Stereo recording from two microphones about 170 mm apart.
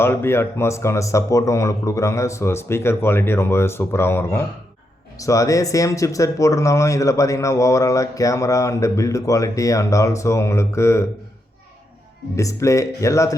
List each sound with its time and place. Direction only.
0.0 s speech: 15° left (ahead or behind)
12.4 s speech: 20° left (ahead or behind)